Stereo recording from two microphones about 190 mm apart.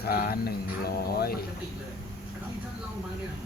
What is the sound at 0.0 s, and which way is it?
Mantra, 50° left (ahead or behind).